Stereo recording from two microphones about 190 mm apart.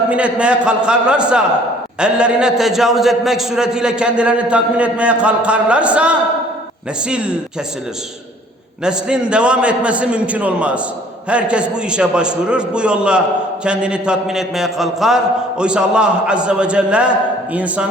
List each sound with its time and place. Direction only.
0.1 s a man's voice: 5° right (ahead or behind)
8.8 s a man's voice: 5° right (ahead or behind)